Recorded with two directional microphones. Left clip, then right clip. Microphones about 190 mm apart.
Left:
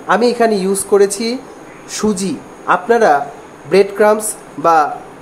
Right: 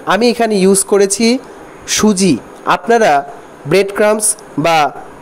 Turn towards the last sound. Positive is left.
turn(degrees=-45)  # may be behind; listen again after turning